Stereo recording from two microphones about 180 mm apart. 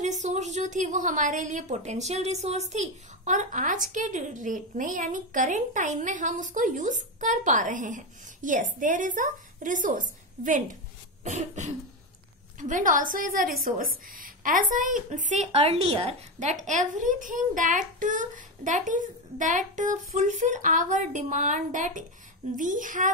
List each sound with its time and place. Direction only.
0.0 s a woman's voice: 40° right (ahead or behind)
11.2 s cough: 40° right (ahead or behind)
12.5 s a woman's voice: 45° right (ahead or behind)